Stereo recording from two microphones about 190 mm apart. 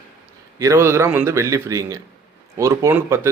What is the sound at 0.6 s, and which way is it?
Speech, 15° right (ahead or behind).